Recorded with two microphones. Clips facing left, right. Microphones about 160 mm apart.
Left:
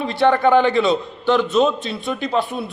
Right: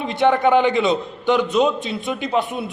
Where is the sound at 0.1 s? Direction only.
20° right (ahead or behind).